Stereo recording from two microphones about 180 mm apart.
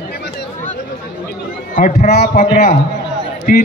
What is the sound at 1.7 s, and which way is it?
Speech, 50° left (ahead or behind).